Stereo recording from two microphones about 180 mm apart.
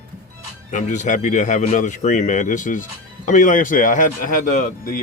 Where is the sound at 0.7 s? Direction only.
45° left (ahead or behind).